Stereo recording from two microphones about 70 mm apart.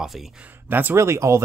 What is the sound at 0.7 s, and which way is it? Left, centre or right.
Speech, right.